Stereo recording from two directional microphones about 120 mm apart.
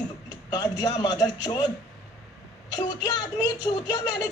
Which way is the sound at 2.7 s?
35° left (ahead or behind).